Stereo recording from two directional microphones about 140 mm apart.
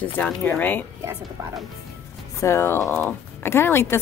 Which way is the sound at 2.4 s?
20° left (ahead or behind).